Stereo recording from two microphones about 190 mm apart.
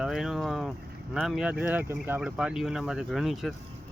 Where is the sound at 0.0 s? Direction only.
Centre (ahead or behind).